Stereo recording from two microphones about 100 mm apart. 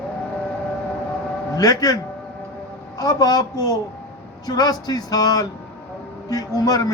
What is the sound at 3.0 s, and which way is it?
A man's voice, 40° left (ahead or behind).